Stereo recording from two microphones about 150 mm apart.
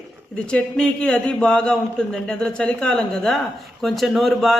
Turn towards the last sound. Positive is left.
turn(degrees=0)  # may be behind; listen again after turning